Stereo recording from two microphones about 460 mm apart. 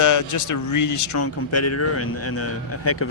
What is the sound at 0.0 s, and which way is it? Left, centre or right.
Speech, left.